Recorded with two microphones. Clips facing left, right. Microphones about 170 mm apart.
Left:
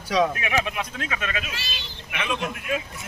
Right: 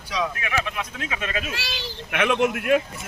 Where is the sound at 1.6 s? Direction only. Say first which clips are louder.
Right 6 dB; 65° right (ahead or behind).